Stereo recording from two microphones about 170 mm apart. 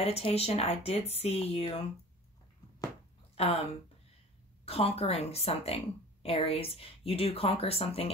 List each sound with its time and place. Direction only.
0.0 s speech: 35° left (ahead or behind)
3.3 s speech: 35° left (ahead or behind)
4.6 s speech: 35° left (ahead or behind)